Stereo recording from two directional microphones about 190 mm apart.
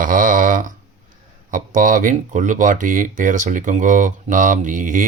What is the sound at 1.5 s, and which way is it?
Speech, 45° right (ahead or behind).